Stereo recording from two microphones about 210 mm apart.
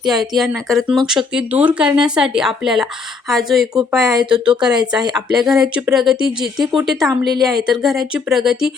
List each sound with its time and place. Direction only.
0.0 s speech: centre (ahead or behind)
4.0 s speech: 20° right (ahead or behind)
5.4 s speech: centre (ahead or behind)
7.1 s speech: 20° right (ahead or behind)
7.5 s speech: centre (ahead or behind)